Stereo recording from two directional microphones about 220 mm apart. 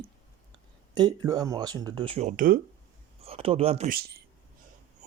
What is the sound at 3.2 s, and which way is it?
Speech, 25° right (ahead or behind).